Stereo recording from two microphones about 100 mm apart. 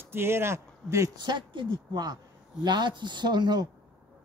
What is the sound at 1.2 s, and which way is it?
A woman's voice, 50° right (ahead or behind).